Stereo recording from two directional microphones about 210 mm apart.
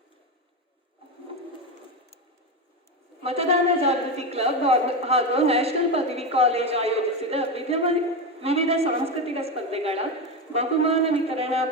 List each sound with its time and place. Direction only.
3.2 s a man's voice: 30° right (ahead or behind)